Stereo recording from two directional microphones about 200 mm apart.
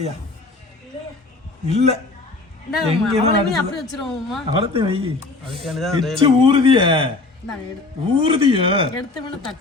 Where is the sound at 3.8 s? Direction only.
Centre (ahead or behind).